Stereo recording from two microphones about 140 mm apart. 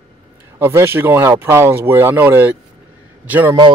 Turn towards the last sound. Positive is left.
turn(degrees=-15)  # may be behind; listen again after turning